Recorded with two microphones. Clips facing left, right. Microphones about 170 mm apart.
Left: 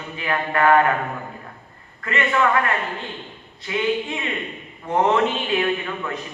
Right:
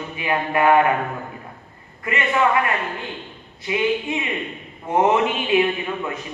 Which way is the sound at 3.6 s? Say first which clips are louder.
Right 1 dB; 15° right (ahead or behind).